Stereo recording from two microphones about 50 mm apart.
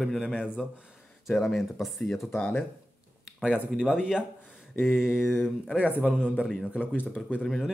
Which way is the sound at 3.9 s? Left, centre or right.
Centre.